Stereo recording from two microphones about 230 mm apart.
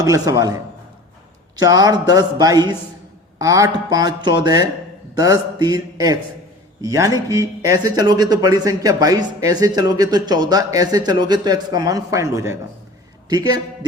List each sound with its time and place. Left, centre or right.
0.0 s speech: centre
1.5 s speech: centre